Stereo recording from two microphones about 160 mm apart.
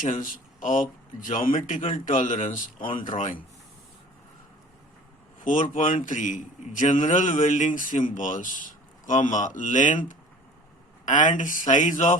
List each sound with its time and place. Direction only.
0.0 s a man's voice: 55° left (ahead or behind)
5.4 s a man's voice: 55° left (ahead or behind)